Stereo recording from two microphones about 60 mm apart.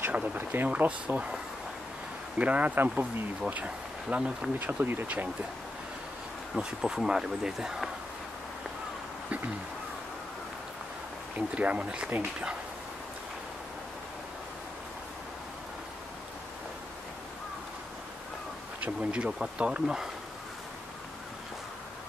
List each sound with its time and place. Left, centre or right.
0.1 s speech: right
0.7 s speech: right
2.3 s speech: right
4.6 s speech: right
6.5 s speech: centre
11.3 s speech: right
18.8 s speech: right